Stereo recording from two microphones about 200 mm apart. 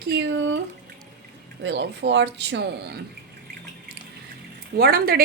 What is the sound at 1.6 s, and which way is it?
Speech, 60° right (ahead or behind).